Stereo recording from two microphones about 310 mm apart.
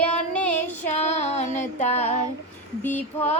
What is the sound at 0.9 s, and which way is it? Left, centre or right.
Child singing, left.